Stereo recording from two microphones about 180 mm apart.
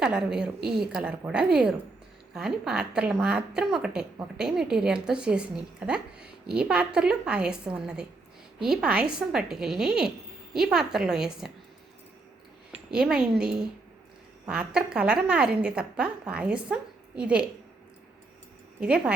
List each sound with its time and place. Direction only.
0.0 s a woman's voice: 5° right (ahead or behind)
12.9 s a woman's voice: 5° right (ahead or behind)
18.8 s a woman's voice: 5° right (ahead or behind)